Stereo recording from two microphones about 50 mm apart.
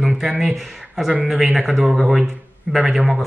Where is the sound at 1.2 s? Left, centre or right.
Centre.